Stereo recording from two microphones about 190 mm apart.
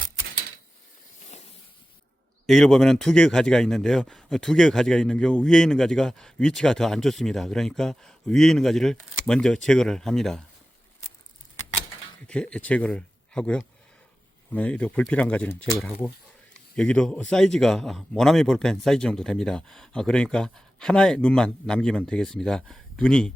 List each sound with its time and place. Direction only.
1.3 s a sound: 35° left (ahead or behind)
2.5 s a man's voice: centre (ahead or behind)
12.3 s a man's voice: 5° left (ahead or behind)